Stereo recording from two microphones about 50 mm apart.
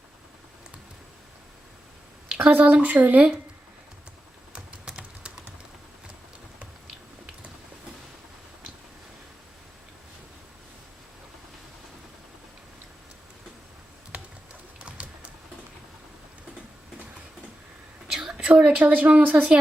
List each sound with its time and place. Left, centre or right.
2.5 s speech: right
4.5 s typing: centre
14.8 s pigeon: right
18.1 s a sound: centre
18.4 s a woman's voice: right